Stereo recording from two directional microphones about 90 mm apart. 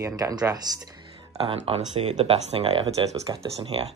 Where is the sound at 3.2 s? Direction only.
75° right (ahead or behind).